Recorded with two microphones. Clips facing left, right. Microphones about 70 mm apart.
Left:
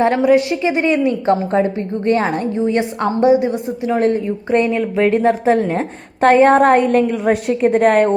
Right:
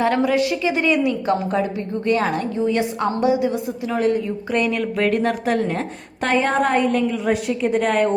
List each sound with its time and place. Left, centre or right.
0.0 s a woman's voice: left
6.2 s a woman's voice: left